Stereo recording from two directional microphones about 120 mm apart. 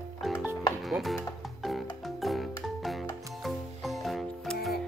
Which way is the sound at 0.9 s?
Centre (ahead or behind).